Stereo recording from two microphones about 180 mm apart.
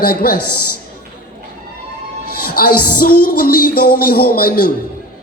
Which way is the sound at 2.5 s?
55° left (ahead or behind).